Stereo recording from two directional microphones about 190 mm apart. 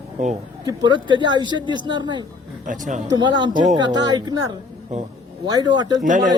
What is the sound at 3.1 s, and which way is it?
Speech, 25° right (ahead or behind).